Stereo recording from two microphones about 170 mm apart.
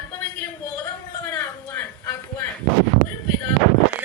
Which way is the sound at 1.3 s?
10° left (ahead or behind).